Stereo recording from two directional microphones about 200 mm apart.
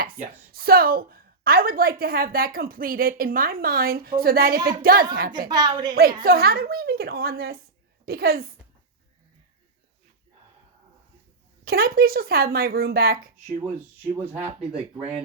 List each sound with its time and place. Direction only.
0.0 s a woman's voice: 50° right (ahead or behind)
5.5 s a woman's voice: 20° right (ahead or behind)
5.9 s a woman's voice: 50° right (ahead or behind)
11.6 s a woman's voice: 50° right (ahead or behind)
14.1 s speech: 10° right (ahead or behind)